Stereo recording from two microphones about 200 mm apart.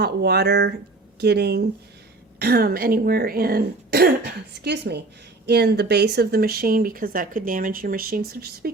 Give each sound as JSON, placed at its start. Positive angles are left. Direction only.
{"t": 0.0, "sound": "speech", "side_deg": -55}